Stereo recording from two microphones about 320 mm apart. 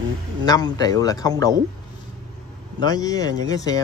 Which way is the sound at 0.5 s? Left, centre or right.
Centre.